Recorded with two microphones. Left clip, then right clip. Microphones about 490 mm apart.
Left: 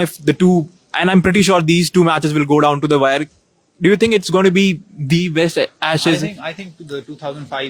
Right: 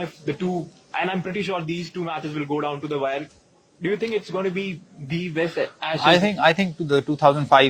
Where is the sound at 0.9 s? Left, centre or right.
Left.